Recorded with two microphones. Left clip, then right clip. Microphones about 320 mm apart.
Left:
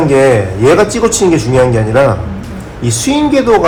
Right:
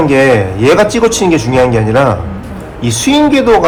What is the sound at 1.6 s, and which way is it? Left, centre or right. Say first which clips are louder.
Speech: even; right.